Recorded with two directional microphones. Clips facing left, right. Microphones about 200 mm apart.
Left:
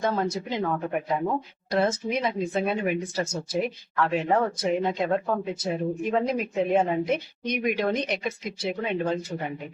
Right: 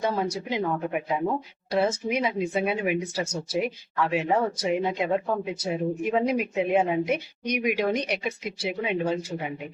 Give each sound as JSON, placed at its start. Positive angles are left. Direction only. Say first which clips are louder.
{"t": 0.0, "sound": "speech", "louder": "left 1 dB", "side_deg": -10}